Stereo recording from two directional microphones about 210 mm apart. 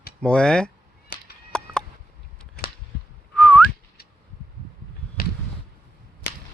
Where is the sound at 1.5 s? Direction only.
5° left (ahead or behind).